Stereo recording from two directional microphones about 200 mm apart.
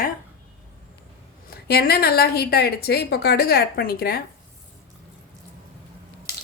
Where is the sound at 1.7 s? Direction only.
50° left (ahead or behind).